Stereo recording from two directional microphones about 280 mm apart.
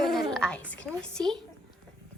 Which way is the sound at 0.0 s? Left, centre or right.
Centre.